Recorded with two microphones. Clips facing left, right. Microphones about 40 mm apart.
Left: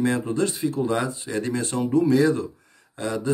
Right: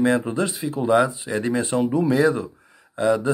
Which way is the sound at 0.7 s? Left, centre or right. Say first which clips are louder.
Right 6 dB; right.